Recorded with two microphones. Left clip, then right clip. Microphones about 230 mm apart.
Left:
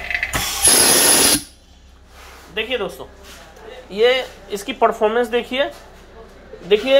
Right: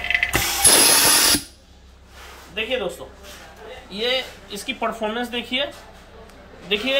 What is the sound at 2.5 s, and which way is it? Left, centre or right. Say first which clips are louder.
Speech: left 2 dB; centre.